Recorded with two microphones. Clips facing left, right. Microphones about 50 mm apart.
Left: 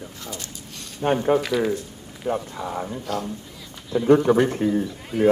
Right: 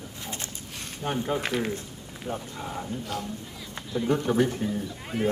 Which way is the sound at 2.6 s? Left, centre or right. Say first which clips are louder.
Left 2 dB; left.